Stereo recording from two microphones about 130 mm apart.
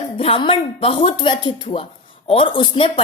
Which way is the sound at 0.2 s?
45° left (ahead or behind).